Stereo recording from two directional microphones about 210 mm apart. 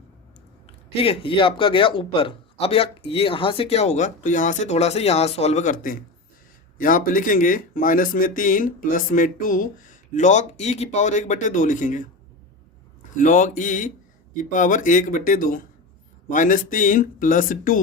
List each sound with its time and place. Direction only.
0.9 s a man's voice: 25° left (ahead or behind)
13.1 s speech: 40° left (ahead or behind)